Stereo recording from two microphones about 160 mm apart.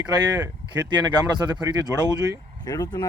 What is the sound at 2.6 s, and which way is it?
Speech, 25° left (ahead or behind).